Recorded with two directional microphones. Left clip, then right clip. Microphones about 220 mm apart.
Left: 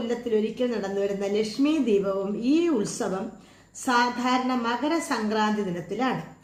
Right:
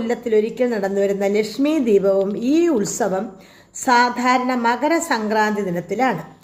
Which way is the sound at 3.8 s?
25° right (ahead or behind).